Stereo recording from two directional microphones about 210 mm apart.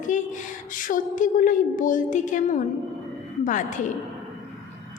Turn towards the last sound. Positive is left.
turn(degrees=35)  # may be behind; listen again after turning